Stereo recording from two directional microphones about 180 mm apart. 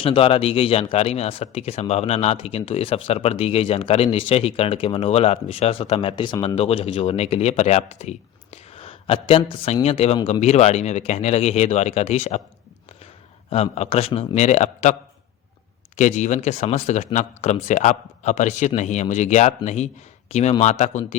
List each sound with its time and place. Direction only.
0.0 s speech: 30° left (ahead or behind)
13.5 s speech: 35° left (ahead or behind)
16.0 s speech: 40° left (ahead or behind)